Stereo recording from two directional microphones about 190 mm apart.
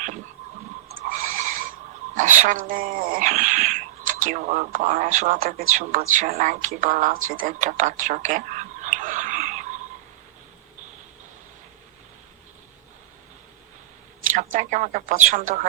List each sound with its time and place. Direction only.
0.9 s a sound: 45° right (ahead or behind)
2.1 s speech: 40° right (ahead or behind)
14.3 s speech: 40° right (ahead or behind)